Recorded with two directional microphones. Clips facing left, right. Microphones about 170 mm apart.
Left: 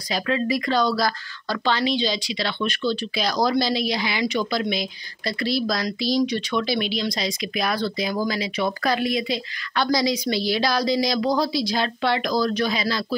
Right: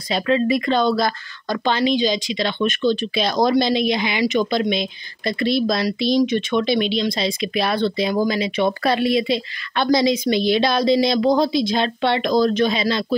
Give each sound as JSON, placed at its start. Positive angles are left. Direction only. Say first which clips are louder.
{"t": 0.1, "sound": "speech", "louder": "right 5 dB", "side_deg": -25}